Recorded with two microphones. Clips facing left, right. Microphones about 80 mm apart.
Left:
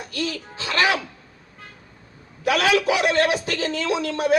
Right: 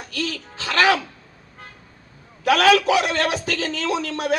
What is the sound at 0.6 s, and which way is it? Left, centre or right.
Music, right.